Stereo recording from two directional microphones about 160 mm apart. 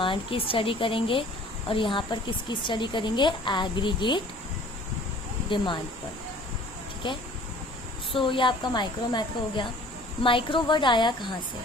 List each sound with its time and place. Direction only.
0.0 s a woman's voice: 35° left (ahead or behind)
5.5 s a woman's voice: 30° left (ahead or behind)
8.1 s a woman's voice: 30° left (ahead or behind)